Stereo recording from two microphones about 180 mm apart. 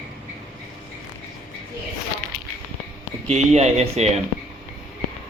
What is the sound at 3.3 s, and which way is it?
Speech, 35° right (ahead or behind).